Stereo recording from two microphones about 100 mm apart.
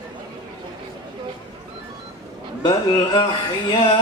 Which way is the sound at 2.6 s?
45° left (ahead or behind).